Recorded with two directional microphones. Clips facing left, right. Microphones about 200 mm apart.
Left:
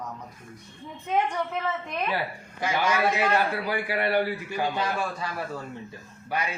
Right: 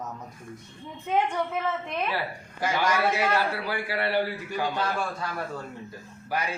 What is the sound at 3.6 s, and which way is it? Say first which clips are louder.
Speech: left 2 dB; 15° left (ahead or behind).